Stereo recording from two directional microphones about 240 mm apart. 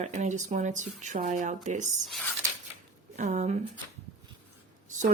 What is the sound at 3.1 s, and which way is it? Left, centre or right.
Speech, right.